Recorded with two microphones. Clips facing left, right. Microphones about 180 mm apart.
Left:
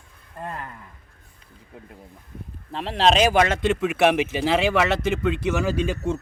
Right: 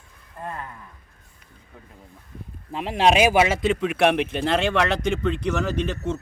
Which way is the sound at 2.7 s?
10° right (ahead or behind).